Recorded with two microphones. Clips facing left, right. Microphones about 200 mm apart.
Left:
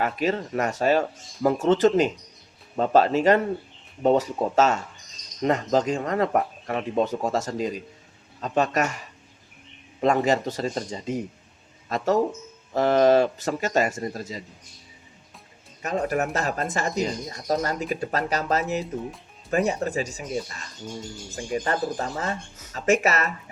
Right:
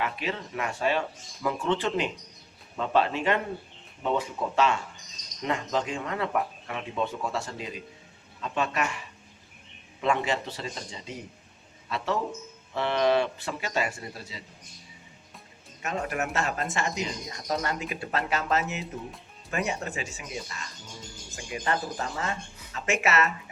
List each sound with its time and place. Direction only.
0.0 s speech: 45° left (ahead or behind)
15.8 s speech: 35° left (ahead or behind)